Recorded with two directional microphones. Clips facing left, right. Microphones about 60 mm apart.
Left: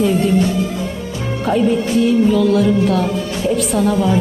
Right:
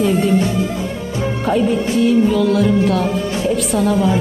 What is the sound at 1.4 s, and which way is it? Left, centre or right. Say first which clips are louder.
Music: left 2 dB; centre.